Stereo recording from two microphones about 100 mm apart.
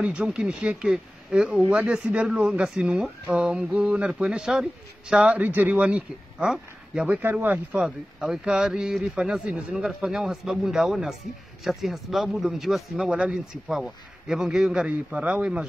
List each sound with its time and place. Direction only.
0.0 s speech: 10° right (ahead or behind)
7.8 s speech: 5° right (ahead or behind)